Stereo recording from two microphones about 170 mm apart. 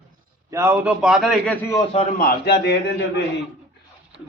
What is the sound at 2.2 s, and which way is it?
A man's voice, 70° left (ahead or behind).